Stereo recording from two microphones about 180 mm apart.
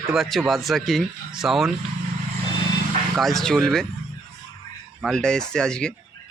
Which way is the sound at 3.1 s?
Centre (ahead or behind).